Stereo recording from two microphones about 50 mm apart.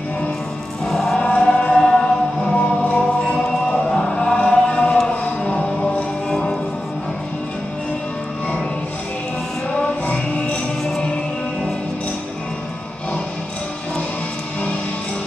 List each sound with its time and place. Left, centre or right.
0.8 s choir: centre
1.1 s choir: centre
2.5 s choir: left
4.4 s chant: left
5.1 s music: left
10.0 s music: left